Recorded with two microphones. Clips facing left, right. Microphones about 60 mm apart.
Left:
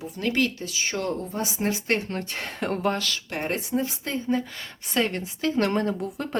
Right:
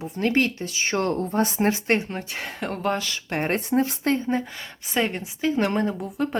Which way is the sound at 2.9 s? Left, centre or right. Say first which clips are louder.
Even; centre.